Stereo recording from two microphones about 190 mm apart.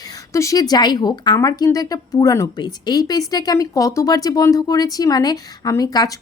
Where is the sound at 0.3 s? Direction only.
15° left (ahead or behind).